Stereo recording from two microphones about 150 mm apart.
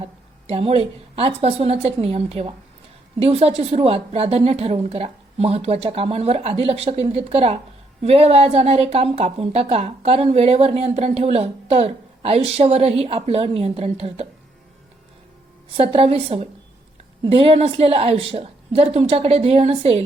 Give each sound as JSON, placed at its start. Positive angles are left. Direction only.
{"t": 0.0, "sound": "a woman's voice", "side_deg": -45}
{"t": 15.8, "sound": "a woman's voice", "side_deg": -40}